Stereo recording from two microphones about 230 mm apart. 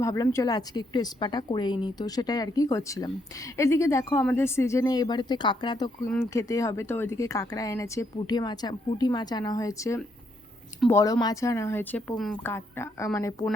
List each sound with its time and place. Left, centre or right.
0.0 s a woman's voice: centre